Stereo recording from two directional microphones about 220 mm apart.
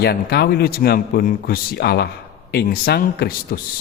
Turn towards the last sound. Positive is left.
turn(degrees=45)  # may be behind; listen again after turning